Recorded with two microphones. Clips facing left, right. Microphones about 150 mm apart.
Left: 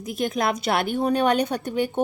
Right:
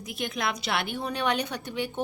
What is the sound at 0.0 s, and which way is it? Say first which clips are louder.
A woman's voice: left 7 dB; 45° left (ahead or behind).